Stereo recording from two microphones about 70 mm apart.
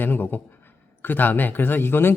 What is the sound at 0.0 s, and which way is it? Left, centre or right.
Speech, left.